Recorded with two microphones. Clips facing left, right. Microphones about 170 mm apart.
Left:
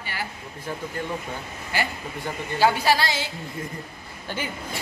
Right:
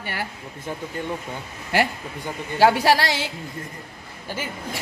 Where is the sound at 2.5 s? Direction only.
70° right (ahead or behind).